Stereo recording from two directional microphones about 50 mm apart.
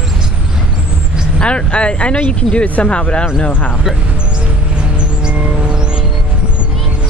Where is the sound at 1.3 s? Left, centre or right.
Left.